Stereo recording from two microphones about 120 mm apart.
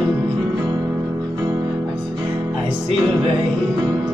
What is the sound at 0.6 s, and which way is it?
Music, 30° right (ahead or behind).